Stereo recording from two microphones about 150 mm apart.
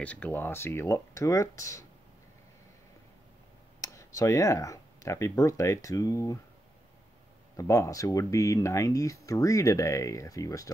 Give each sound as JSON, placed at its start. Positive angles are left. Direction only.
{"t": 0.0, "sound": "speech", "side_deg": 10}
{"t": 3.8, "sound": "speech", "side_deg": 20}
{"t": 7.5, "sound": "speech", "side_deg": 20}